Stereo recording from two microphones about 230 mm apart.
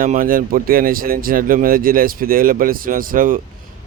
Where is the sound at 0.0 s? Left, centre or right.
Right.